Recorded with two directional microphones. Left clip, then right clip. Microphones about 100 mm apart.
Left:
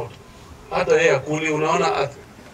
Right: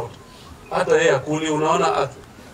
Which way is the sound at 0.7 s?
15° right (ahead or behind).